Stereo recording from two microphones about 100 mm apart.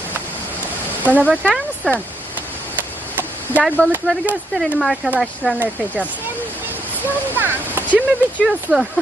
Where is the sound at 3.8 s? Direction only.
15° left (ahead or behind).